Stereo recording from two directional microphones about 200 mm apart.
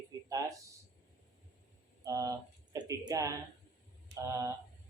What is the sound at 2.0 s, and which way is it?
Speech, 15° right (ahead or behind).